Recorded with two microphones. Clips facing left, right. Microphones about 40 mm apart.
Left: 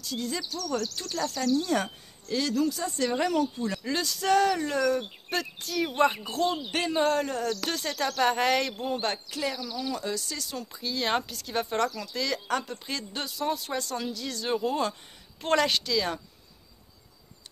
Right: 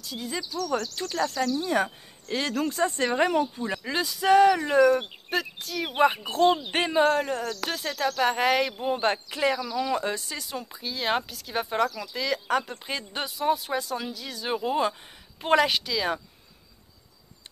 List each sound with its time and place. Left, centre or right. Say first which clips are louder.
0.0 s speech: left 1 dB; centre
0.7 s speech: right 1 dB; right
2.3 s speech: even; right
5.3 s speech: right 2 dB; centre
5.9 s speech: right 3 dB; centre
6.2 s speech: right 6 dB; right
7.0 s speech: right 3 dB; centre
9.0 s speech: right 6 dB; right; by 16.2 s centre